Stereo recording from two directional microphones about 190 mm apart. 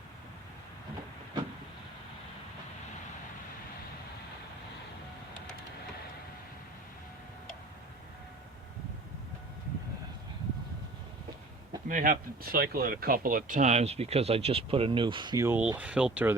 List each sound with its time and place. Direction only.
11.9 s speech: 45° right (ahead or behind); by 16.3 s 5° right (ahead or behind)